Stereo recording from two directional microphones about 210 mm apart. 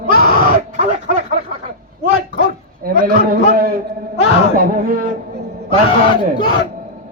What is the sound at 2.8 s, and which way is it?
Speech, 45° right (ahead or behind).